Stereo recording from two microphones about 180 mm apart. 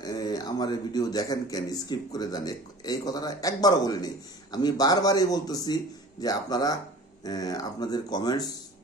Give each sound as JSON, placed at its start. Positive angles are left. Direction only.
{"t": 0.0, "sound": "speech", "side_deg": 20}